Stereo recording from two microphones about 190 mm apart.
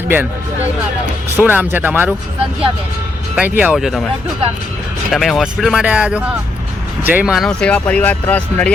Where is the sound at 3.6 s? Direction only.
5° right (ahead or behind).